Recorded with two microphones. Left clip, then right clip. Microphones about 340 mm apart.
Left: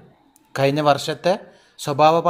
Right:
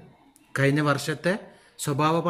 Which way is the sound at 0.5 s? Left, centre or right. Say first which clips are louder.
Left 6 dB; centre.